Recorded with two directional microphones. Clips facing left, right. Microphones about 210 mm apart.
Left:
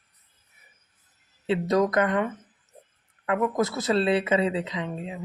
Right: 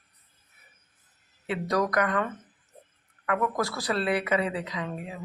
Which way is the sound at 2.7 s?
15° left (ahead or behind).